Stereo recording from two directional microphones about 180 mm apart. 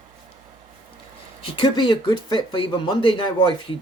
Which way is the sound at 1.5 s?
25° left (ahead or behind).